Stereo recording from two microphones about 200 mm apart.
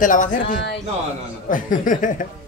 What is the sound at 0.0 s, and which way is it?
Speech, 40° left (ahead or behind).